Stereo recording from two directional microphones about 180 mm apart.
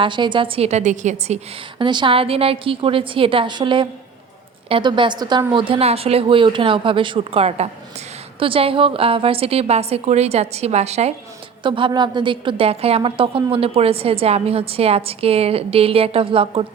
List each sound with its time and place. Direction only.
0.0 s a woman's voice: 25° right (ahead or behind)
1.8 s a woman's voice: 25° right (ahead or behind)